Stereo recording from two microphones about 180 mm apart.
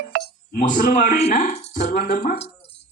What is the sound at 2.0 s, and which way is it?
Speech, 60° left (ahead or behind).